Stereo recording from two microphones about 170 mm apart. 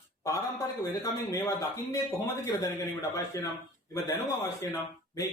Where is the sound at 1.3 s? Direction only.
20° left (ahead or behind).